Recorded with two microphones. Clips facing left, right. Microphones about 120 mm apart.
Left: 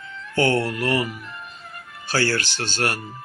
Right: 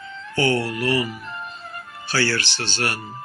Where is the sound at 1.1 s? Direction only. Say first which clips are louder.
Right 4 dB; 30° right (ahead or behind).